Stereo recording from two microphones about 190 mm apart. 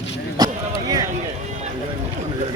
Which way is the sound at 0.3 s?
20° right (ahead or behind).